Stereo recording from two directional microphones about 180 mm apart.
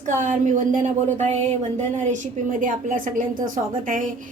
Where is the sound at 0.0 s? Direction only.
45° right (ahead or behind).